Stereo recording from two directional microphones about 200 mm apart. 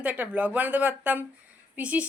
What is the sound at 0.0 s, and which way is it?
A woman's voice, 10° right (ahead or behind).